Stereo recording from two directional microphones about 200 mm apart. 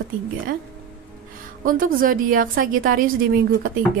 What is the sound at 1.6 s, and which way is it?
A woman's voice, 45° right (ahead or behind).